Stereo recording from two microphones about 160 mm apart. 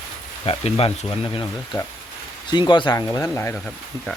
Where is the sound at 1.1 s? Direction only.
25° left (ahead or behind).